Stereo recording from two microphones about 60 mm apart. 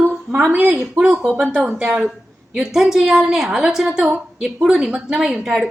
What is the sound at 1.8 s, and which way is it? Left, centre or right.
Speech, centre.